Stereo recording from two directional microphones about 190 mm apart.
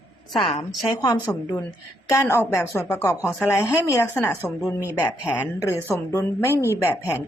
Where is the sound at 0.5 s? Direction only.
20° left (ahead or behind).